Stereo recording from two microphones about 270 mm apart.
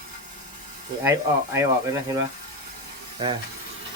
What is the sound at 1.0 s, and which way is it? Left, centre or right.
Speech, centre.